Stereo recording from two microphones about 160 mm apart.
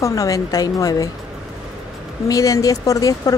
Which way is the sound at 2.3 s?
20° left (ahead or behind).